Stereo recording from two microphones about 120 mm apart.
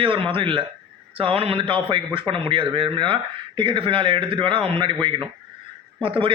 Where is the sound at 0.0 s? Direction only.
50° right (ahead or behind).